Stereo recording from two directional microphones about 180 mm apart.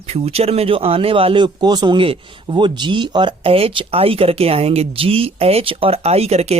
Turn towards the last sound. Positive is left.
turn(degrees=-35)  # may be behind; listen again after turning